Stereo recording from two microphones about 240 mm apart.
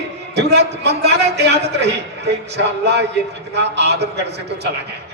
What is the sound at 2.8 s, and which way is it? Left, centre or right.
A man's voice, right.